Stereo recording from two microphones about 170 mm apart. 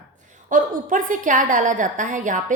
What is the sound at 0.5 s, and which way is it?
A woman's voice, 50° right (ahead or behind).